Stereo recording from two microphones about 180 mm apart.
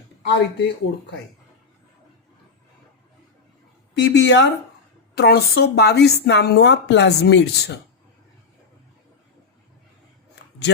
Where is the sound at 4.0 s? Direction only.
85° left.